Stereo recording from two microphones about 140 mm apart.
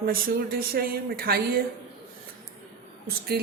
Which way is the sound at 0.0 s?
90° right.